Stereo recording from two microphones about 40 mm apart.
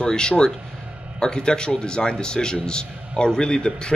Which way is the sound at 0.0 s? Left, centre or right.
Left.